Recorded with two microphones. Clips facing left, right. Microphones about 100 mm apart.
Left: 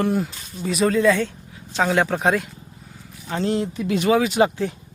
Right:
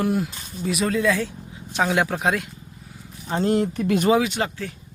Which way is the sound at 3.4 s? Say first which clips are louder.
Right 2 dB; 45° right (ahead or behind).